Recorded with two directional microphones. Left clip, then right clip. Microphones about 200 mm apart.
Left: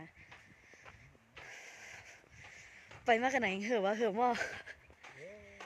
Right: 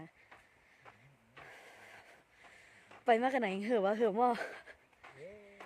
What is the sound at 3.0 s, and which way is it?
Speech, 15° right (ahead or behind).